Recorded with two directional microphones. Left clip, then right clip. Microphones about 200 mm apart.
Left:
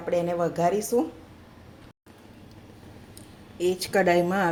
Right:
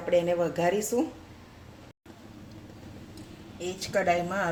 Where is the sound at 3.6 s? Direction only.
50° left (ahead or behind).